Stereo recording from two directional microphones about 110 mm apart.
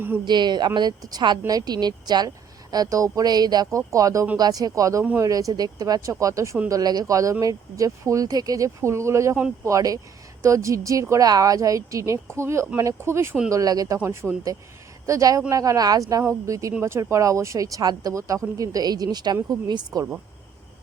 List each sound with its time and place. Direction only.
0.3 s a woman's voice: 40° right (ahead or behind)